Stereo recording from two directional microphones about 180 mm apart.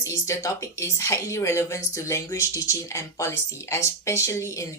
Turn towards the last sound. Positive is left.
turn(degrees=15)  # may be behind; listen again after turning